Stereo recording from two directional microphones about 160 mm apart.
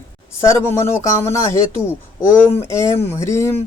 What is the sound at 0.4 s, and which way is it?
Speech, 15° left (ahead or behind).